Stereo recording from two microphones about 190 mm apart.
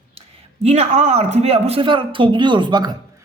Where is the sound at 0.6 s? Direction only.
35° right (ahead or behind).